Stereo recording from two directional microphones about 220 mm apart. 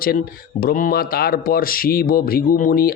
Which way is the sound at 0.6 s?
40° left (ahead or behind).